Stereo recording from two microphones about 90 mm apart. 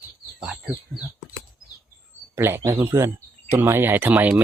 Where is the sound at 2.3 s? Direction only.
25° right (ahead or behind).